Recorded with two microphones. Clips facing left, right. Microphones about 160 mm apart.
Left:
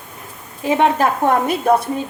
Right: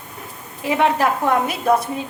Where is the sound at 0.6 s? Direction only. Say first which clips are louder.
Left 3 dB; 25° left (ahead or behind).